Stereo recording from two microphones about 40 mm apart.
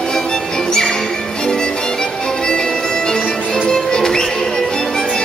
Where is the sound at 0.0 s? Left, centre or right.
Centre.